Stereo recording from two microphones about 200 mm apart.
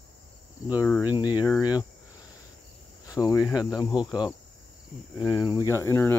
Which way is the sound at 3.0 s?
15° left (ahead or behind).